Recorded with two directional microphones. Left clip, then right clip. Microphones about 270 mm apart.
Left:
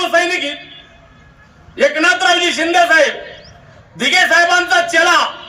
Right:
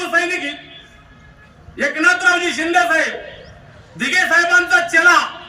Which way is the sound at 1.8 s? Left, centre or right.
Left.